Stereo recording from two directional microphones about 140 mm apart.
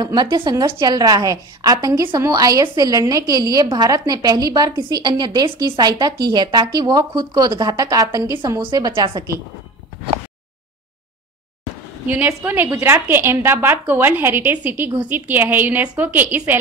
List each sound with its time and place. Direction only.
0.0 s a woman's voice: 30° right (ahead or behind)
12.1 s a woman's voice: 15° right (ahead or behind)